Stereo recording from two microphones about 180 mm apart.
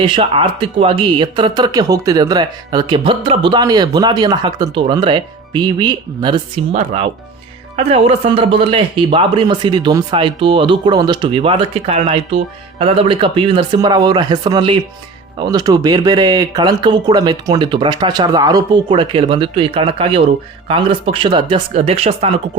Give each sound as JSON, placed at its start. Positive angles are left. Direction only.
{"t": 0.0, "sound": "speech", "side_deg": -30}